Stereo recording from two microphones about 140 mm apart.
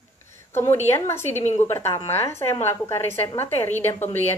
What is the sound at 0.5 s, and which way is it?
A woman's voice, 15° left (ahead or behind).